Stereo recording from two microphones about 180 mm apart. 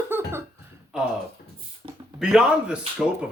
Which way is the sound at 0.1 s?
15° right (ahead or behind).